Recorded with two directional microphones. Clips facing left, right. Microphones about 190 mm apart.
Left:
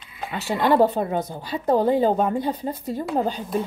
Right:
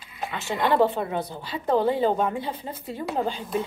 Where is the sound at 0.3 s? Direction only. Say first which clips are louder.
Left 4 dB; 40° left (ahead or behind).